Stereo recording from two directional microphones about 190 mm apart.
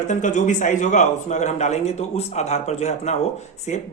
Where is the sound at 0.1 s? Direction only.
40° left (ahead or behind).